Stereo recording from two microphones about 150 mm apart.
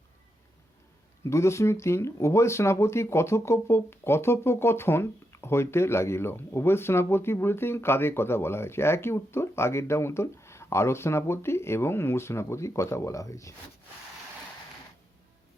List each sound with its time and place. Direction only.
1.2 s speech: 20° left (ahead or behind)